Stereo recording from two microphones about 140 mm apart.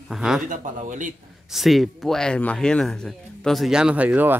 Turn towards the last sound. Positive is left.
turn(degrees=-10)  # may be behind; listen again after turning